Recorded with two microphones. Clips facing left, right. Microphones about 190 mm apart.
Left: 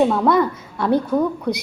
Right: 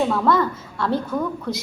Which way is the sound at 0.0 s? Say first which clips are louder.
Left 3 dB; 20° left (ahead or behind).